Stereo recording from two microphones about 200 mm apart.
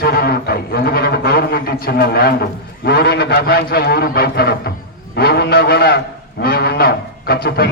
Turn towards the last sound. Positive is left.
turn(degrees=50)  # may be behind; listen again after turning